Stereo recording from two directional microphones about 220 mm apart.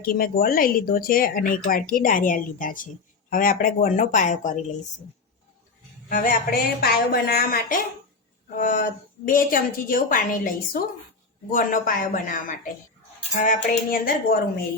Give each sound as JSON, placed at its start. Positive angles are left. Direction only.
{"t": 0.0, "sound": "speech", "side_deg": 40}
{"t": 6.1, "sound": "speech", "side_deg": 40}